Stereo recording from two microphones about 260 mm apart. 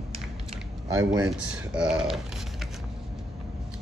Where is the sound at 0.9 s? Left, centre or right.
Centre.